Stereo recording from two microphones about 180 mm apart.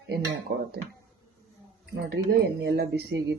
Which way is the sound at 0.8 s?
65° right (ahead or behind).